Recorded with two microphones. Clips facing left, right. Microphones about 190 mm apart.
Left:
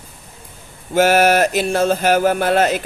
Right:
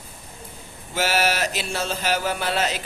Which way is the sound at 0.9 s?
50° left (ahead or behind).